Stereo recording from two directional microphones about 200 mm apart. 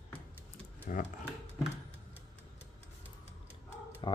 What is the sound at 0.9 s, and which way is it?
Speech, 40° left (ahead or behind).